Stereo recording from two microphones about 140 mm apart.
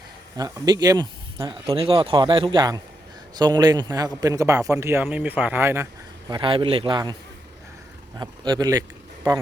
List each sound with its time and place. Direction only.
0.6 s a man's voice: 30° right (ahead or behind)
6.3 s speech: 35° right (ahead or behind)
8.2 s a man's voice: 30° right (ahead or behind)